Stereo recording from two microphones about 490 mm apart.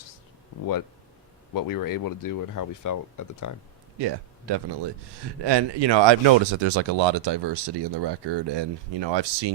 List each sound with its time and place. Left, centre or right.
1.5 s speech: left
3.9 s speech: right